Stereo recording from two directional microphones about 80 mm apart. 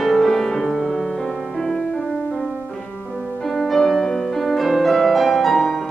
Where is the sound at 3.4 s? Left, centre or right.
Centre.